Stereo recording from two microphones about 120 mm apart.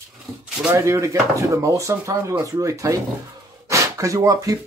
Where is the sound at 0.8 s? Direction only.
25° right (ahead or behind).